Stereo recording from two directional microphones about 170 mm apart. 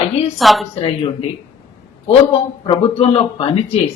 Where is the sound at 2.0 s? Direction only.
35° left (ahead or behind).